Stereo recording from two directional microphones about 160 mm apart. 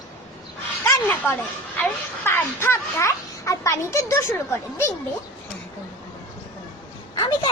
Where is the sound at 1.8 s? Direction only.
15° left (ahead or behind).